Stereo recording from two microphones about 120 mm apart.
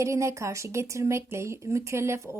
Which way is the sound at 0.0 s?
25° right (ahead or behind).